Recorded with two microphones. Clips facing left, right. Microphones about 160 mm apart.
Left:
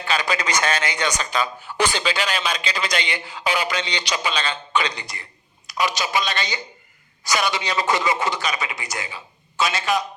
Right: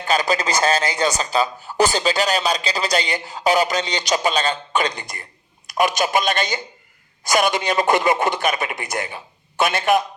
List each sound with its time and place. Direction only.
0.0 s a man's voice: 40° right (ahead or behind)